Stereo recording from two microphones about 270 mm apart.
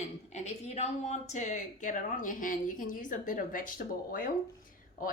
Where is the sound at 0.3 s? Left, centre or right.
Left.